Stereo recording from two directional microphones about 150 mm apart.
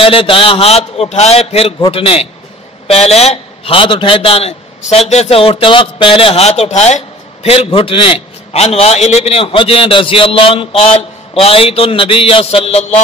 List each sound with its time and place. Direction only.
0.0 s a man's voice: 35° left (ahead or behind)